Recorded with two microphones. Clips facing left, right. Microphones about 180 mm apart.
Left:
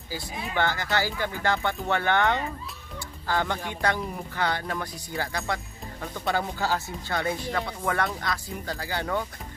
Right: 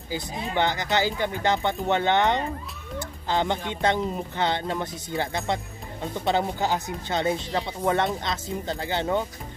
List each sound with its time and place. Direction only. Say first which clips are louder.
0.1 s speech: right 3 dB; 20° right (ahead or behind)